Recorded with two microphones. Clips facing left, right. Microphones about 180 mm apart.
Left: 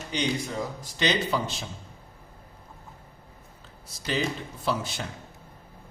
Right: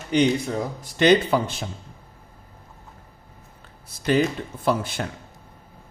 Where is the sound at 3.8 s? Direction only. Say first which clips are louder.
Right 8 dB; 55° right (ahead or behind).